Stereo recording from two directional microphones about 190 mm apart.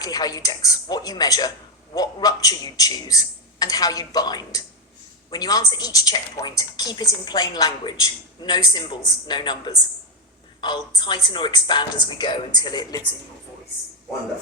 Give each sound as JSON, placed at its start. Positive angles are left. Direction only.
{"t": 0.0, "sound": "a woman's voice", "side_deg": 20}